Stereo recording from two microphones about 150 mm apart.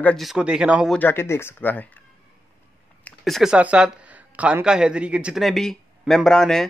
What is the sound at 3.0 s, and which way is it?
Speech, centre (ahead or behind).